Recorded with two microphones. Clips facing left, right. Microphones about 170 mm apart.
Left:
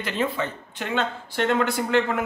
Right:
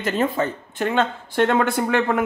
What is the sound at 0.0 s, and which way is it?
Speech, 45° right (ahead or behind).